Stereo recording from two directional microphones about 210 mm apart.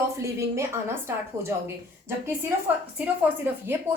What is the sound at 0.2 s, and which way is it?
A woman's voice, 15° right (ahead or behind).